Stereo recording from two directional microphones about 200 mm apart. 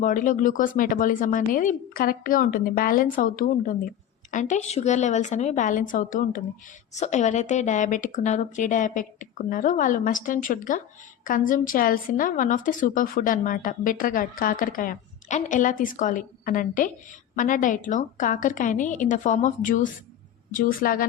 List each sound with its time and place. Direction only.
0.0 s a woman's voice: 40° left (ahead or behind)